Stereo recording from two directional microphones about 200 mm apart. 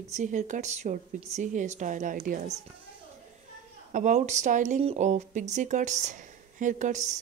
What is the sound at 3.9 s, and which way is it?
Speech, 35° right (ahead or behind).